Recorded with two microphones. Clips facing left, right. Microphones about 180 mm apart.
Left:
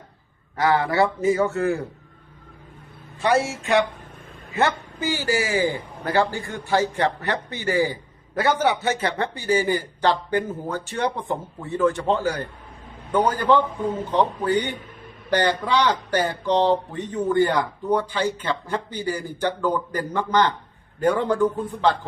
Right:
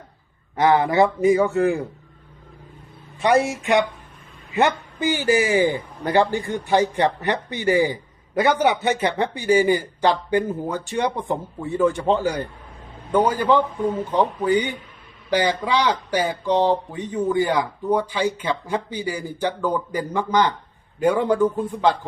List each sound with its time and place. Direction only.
0.5 s speech: 20° right (ahead or behind)
3.2 s speech: 15° right (ahead or behind)